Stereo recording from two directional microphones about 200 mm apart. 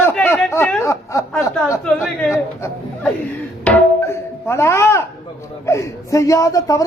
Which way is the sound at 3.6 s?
10° left (ahead or behind).